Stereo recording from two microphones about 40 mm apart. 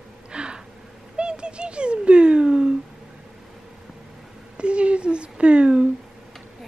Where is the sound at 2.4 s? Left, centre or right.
Centre.